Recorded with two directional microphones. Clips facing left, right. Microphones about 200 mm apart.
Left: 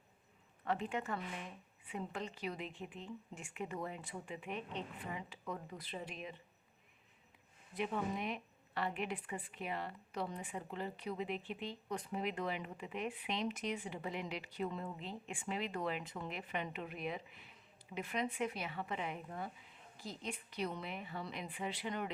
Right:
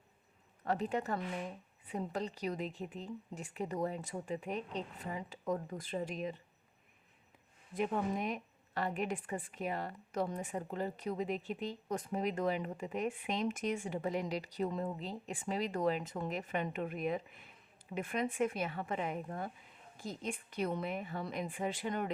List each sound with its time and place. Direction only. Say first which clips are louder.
0.6 s speech: right 4 dB; 40° right (ahead or behind)
7.7 s a woman's voice: right 4 dB; 45° right (ahead or behind)